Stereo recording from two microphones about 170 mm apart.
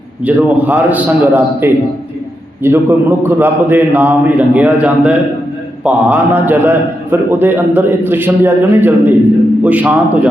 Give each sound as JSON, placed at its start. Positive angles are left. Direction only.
{"t": 0.3, "sound": "a man's voice", "side_deg": -10}